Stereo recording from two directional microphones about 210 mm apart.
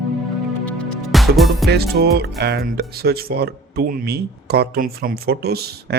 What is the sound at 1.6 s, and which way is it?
Speech, 50° right (ahead or behind).